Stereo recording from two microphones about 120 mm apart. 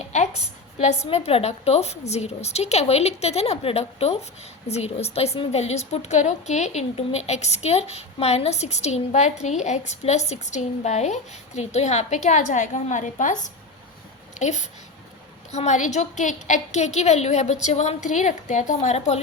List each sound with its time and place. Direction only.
0.8 s a woman's voice: 65° left (ahead or behind); by 13.5 s 90° left
14.3 s a woman's voice: 75° left (ahead or behind)